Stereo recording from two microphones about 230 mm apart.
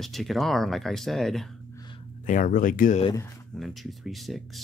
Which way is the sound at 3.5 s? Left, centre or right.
Centre.